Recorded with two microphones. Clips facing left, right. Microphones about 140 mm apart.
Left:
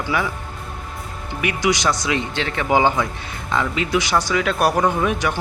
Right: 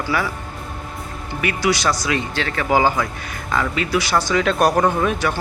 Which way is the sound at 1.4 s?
15° left (ahead or behind).